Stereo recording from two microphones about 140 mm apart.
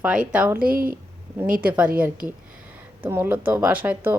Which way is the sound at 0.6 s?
90° right.